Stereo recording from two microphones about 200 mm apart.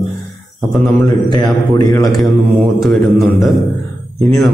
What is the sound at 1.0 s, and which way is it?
A man's voice, 20° left (ahead or behind).